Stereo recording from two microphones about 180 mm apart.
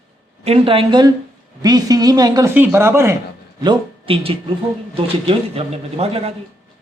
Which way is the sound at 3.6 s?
25° right (ahead or behind).